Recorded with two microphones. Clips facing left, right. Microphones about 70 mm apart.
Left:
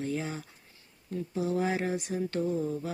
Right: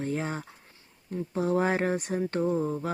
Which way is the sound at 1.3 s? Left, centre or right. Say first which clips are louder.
Right 4 dB; right.